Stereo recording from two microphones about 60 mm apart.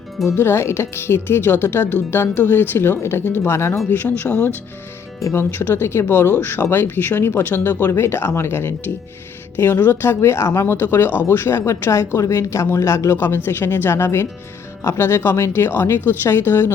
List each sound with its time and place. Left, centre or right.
0.3 s speech: left
3.8 s speech: left
10.9 s speech: left
13.1 s speech: left